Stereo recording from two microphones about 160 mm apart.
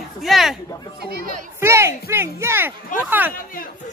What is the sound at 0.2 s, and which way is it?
Speech, centre (ahead or behind).